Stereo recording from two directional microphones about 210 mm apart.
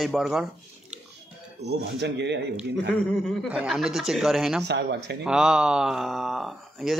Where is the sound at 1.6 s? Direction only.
55° right (ahead or behind).